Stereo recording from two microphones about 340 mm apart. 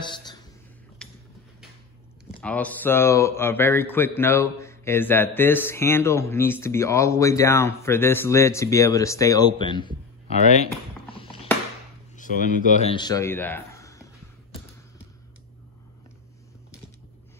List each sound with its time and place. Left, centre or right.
0.0 s a sound: centre
2.4 s a man's voice: centre
10.4 s typing: centre
12.2 s speech: left